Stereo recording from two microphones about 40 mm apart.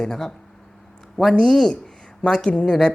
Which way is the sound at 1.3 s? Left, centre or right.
Left.